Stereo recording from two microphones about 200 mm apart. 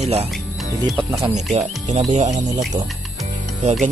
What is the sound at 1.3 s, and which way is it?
Speech, 35° right (ahead or behind).